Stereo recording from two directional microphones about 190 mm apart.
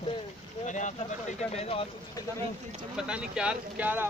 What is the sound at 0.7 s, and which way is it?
Speech, 40° left (ahead or behind).